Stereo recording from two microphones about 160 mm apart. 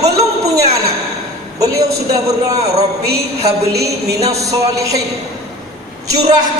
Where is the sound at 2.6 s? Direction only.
40° right (ahead or behind).